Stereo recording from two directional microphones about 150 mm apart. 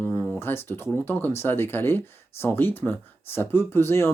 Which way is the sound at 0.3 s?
15° left (ahead or behind).